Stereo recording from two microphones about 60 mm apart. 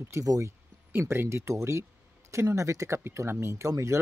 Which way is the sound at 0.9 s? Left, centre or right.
Right.